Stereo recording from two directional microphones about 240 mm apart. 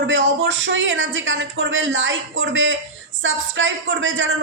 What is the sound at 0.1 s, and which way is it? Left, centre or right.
Speech, right.